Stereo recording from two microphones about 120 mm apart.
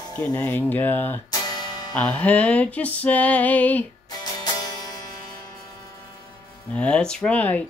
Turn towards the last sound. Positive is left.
turn(degrees=10)  # may be behind; listen again after turning